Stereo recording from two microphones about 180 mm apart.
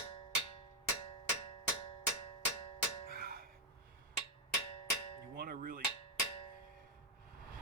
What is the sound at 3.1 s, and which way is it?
Music, 55° right (ahead or behind).